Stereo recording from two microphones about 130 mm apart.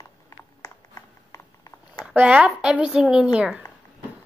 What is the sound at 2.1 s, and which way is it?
A woman's voice, 10° right (ahead or behind).